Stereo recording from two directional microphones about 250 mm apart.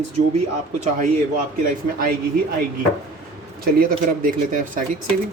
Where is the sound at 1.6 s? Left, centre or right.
Right.